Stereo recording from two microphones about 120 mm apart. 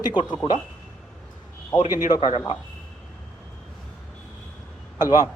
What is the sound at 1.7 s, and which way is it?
Speech, 35° left (ahead or behind).